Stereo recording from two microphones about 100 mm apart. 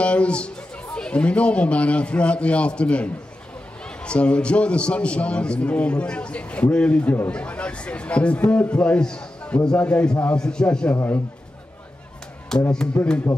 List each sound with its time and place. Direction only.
0.0 s a man's voice: 10° left (ahead or behind)
12.7 s a man's voice: 10° left (ahead or behind)